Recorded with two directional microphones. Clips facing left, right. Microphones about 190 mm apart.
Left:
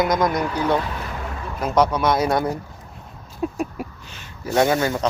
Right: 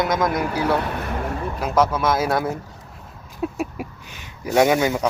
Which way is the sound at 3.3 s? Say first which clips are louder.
Even; 5° right (ahead or behind).